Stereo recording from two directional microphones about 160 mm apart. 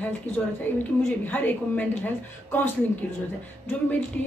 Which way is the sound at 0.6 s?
10° left (ahead or behind).